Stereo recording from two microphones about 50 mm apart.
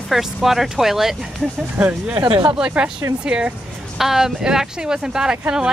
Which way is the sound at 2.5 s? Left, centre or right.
Centre.